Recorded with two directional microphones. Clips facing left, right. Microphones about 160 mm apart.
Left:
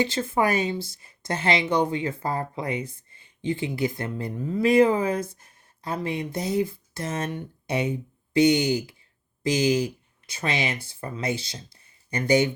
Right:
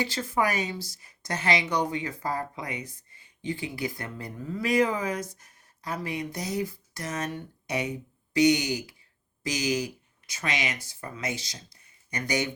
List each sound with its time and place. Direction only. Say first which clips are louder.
0.0 s speech: left 4 dB; 25° left (ahead or behind)